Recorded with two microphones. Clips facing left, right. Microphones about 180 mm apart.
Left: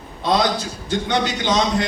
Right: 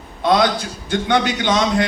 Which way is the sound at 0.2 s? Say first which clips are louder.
Right 3 dB; 55° right (ahead or behind).